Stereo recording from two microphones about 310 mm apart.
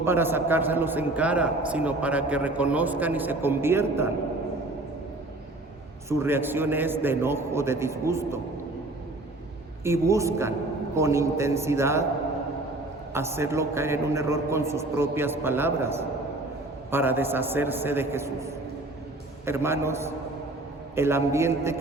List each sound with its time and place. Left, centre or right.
0.0 s a man's voice: centre
6.1 s a man's voice: centre
9.8 s a man's voice: centre
13.1 s a man's voice: centre